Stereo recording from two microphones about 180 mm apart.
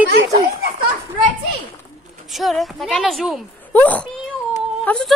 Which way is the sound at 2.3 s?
Centre (ahead or behind).